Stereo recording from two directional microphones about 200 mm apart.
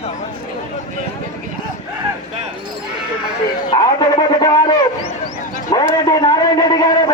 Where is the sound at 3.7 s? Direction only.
20° left (ahead or behind).